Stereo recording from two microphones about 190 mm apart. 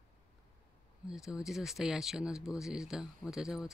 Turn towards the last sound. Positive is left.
turn(degrees=-5)  # may be behind; listen again after turning